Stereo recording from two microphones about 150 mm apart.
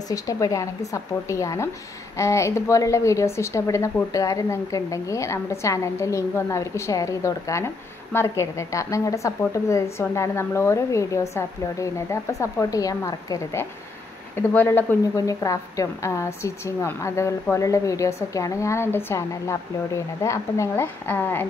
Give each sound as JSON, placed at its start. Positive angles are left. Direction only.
{"t": 0.1, "sound": "a woman's voice", "side_deg": 20}